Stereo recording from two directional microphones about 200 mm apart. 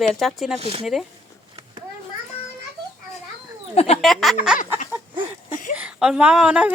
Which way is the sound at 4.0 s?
Centre (ahead or behind).